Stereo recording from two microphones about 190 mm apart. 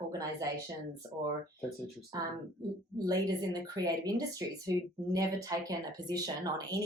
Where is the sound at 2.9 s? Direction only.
20° right (ahead or behind).